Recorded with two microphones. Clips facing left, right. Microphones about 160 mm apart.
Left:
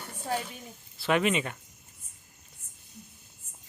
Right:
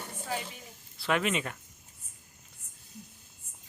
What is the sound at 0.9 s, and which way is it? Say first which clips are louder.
Speech: left 3 dB; centre (ahead or behind).